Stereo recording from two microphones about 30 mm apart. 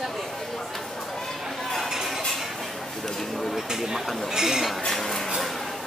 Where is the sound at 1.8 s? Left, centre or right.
Centre.